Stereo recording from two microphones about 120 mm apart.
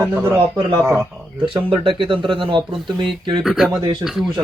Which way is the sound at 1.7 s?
45° right (ahead or behind).